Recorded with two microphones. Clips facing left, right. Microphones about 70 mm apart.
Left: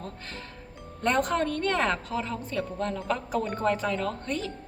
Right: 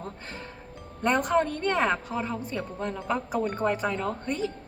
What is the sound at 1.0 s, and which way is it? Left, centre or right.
A woman's voice, centre.